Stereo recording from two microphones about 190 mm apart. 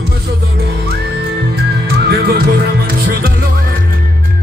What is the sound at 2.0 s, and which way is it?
Music, 55° right (ahead or behind).